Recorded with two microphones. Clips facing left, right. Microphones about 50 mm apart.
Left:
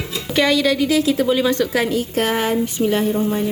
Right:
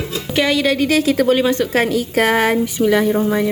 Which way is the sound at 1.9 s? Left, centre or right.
Right.